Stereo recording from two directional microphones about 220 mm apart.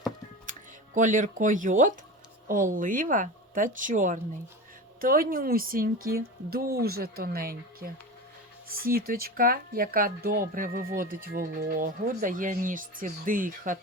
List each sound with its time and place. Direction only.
0.9 s speech: 35° right (ahead or behind)